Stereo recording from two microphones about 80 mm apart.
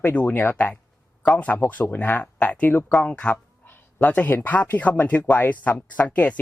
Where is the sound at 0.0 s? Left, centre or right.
Left.